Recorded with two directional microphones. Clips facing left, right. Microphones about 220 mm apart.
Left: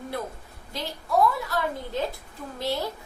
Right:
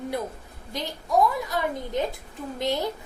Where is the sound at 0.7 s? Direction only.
15° right (ahead or behind).